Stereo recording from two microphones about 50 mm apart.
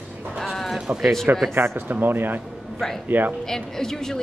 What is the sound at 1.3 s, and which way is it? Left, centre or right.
Speech, right.